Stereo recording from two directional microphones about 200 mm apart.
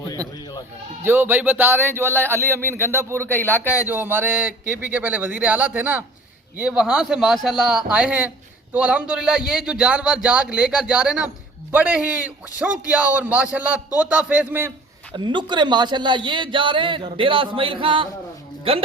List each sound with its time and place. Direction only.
1.0 s a man's voice: 10° right (ahead or behind)
3.3 s speech: 10° left (ahead or behind)
3.7 s a man's voice: 10° right (ahead or behind)
15.1 s a man's voice: 25° right (ahead or behind)